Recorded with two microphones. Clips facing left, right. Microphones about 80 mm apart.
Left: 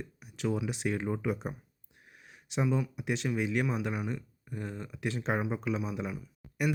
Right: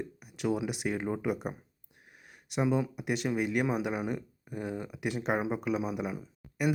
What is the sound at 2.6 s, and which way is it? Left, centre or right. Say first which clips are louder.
Speech: right 3 dB; centre.